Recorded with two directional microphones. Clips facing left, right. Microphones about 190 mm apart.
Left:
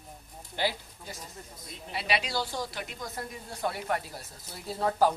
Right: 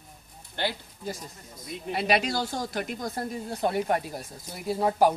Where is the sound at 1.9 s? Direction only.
45° right (ahead or behind).